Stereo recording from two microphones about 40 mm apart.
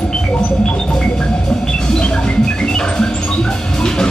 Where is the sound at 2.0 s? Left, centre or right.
Left.